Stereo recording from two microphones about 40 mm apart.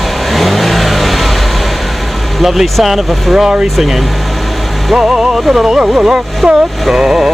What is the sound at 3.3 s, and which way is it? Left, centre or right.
Music, centre.